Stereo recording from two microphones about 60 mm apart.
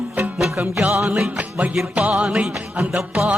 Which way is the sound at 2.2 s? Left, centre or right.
Centre.